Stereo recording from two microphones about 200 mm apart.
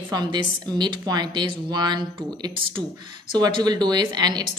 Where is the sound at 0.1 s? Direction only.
20° right (ahead or behind).